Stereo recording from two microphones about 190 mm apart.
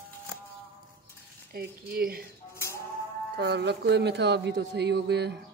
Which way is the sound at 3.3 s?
60° right (ahead or behind).